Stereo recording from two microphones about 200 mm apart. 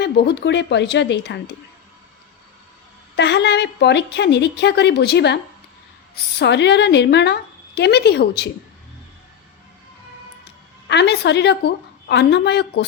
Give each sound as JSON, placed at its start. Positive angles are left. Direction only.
{"t": 0.0, "sound": "a woman's voice", "side_deg": 55}
{"t": 3.2, "sound": "a woman's voice", "side_deg": 60}
{"t": 6.4, "sound": "a woman's voice", "side_deg": 60}
{"t": 10.4, "sound": "a woman's voice", "side_deg": 60}